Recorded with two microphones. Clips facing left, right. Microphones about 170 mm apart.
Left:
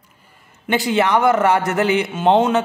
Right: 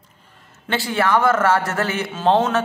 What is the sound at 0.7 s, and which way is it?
A man's voice, 15° left (ahead or behind).